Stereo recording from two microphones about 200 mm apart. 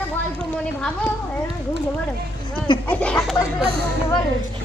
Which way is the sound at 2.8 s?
10° left (ahead or behind).